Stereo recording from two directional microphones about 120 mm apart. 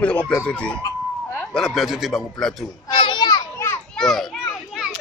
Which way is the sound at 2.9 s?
45° left (ahead or behind).